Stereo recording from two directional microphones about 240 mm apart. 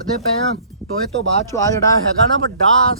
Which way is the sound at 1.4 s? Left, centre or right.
Centre.